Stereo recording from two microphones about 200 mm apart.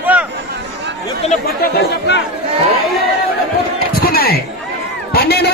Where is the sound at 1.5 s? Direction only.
55° left (ahead or behind).